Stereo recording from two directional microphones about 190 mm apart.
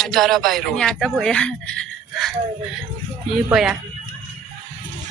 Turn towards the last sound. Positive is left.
turn(degrees=-5)  # may be behind; listen again after turning